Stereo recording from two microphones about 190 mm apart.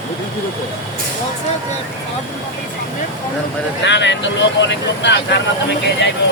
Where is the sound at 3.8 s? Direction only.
70° left (ahead or behind).